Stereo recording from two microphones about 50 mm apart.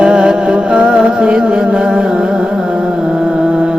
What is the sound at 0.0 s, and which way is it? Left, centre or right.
Music, centre.